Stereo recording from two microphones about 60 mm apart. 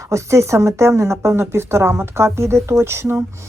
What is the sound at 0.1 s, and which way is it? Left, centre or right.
Speech, right.